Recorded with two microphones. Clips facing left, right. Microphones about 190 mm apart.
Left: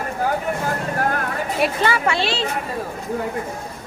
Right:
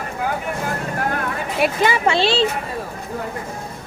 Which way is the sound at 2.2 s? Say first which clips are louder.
Right 5 dB; 30° right (ahead or behind).